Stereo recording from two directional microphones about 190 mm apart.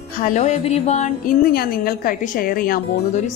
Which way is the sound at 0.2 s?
40° left (ahead or behind).